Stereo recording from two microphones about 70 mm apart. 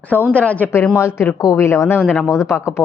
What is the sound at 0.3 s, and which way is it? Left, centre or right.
Speech, left.